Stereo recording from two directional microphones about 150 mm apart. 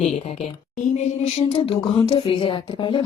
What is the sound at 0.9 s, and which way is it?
Music, 45° left (ahead or behind).